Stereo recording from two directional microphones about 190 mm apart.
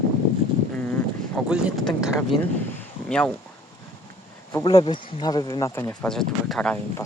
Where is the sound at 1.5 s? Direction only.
5° right (ahead or behind).